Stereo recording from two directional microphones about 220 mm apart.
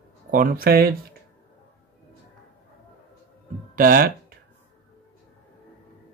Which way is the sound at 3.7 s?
40° right (ahead or behind).